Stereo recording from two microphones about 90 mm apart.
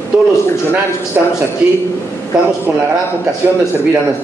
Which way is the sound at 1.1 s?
20° right (ahead or behind).